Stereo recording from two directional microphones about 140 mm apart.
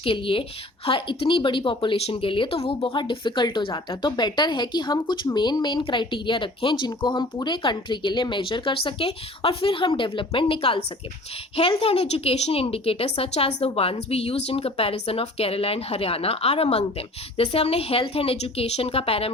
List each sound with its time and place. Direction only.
0.0 s speech: 40° left (ahead or behind)